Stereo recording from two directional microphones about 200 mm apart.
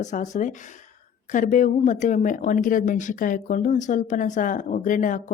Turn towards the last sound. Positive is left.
turn(degrees=40)  # may be behind; listen again after turning